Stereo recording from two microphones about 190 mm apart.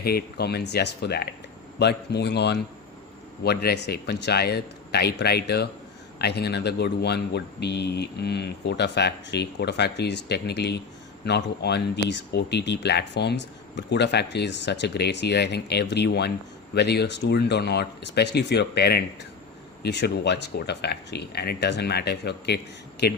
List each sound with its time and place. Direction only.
0.0 s speech: 55° left (ahead or behind)